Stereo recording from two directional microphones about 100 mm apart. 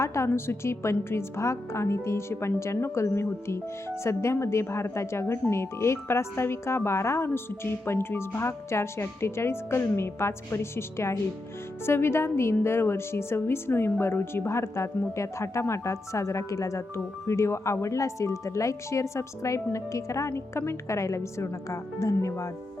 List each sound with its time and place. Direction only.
0.0 s a woman's voice: 30° left (ahead or behind)